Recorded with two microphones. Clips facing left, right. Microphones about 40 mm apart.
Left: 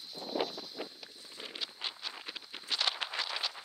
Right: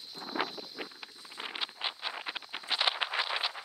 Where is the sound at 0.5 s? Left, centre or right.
Right.